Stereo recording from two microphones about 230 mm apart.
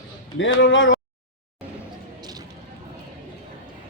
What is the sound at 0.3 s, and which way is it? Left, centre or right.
Speech, left.